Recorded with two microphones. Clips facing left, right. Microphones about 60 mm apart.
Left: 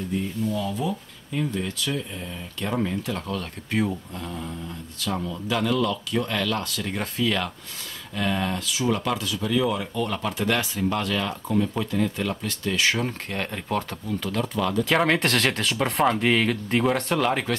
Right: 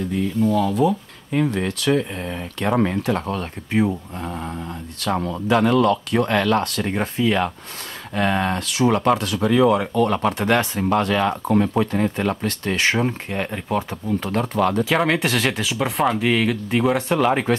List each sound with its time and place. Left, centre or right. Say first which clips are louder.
0.1 s speech: right 7 dB; right
4.2 s speech: right 5 dB; right
6.9 s speech: right 4 dB; right
8.1 s speech: right 5 dB; right
13.0 s speech: right 5 dB; centre
14.0 s speech: right 5 dB; right
14.9 s speech: right 2 dB; centre